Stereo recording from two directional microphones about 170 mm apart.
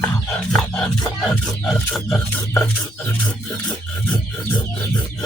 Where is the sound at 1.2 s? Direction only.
Centre (ahead or behind).